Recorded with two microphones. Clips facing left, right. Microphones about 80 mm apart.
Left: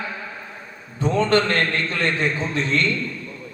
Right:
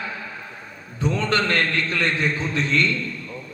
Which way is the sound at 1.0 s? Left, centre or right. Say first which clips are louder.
Left 4 dB; left.